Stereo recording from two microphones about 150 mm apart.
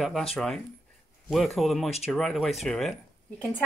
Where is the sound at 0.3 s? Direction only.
Centre (ahead or behind).